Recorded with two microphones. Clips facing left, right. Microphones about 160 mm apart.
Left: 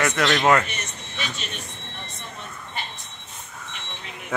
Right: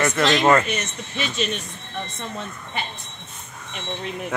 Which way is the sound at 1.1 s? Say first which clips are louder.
Right 5 dB; 20° right (ahead or behind).